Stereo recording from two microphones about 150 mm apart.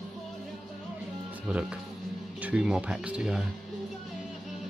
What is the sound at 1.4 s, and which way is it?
Speech, 5° right (ahead or behind).